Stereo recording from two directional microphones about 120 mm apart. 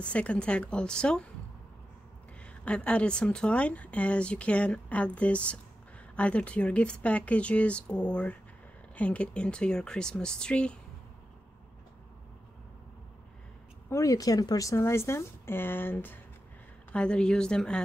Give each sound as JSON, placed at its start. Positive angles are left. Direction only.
{"t": 0.0, "sound": "speech", "side_deg": 10}
{"t": 2.4, "sound": "speech", "side_deg": 10}
{"t": 13.8, "sound": "a woman's voice", "side_deg": 25}